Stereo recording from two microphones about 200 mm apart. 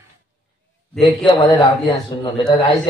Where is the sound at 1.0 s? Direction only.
20° left (ahead or behind).